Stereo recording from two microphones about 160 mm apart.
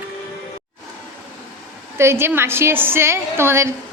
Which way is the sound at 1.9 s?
15° right (ahead or behind).